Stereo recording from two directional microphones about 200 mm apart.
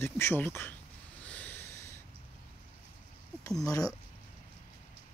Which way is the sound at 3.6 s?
15° left (ahead or behind).